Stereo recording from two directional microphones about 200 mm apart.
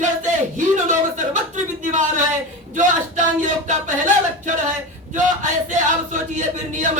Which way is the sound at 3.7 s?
40° right (ahead or behind).